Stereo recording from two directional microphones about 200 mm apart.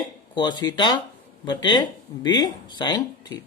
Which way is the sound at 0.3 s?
20° left (ahead or behind).